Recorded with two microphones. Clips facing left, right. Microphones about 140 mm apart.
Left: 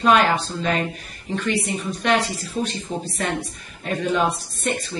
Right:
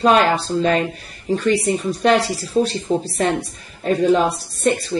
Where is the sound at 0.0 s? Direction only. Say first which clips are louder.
Right 3 dB; 35° right (ahead or behind).